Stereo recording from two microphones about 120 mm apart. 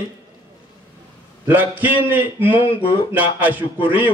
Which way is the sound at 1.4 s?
15° right (ahead or behind).